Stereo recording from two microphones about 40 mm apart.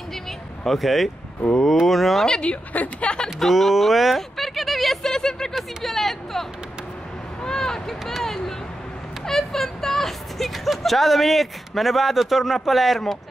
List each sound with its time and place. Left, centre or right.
0.7 s speech: centre
2.7 s a woman's voice: left
3.3 s speech: centre
5.5 s speech: centre
5.9 s speech: centre
7.4 s speech: centre